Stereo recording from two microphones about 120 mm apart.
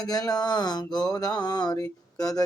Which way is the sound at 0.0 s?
35° left (ahead or behind).